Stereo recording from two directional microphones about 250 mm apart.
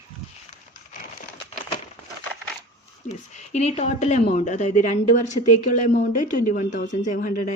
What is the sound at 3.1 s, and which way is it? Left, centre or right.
Speech, left.